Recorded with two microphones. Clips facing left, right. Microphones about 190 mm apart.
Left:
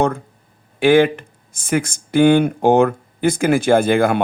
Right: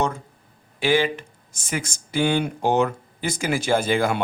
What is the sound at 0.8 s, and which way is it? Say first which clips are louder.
A man's voice: left 8 dB; 55° left (ahead or behind).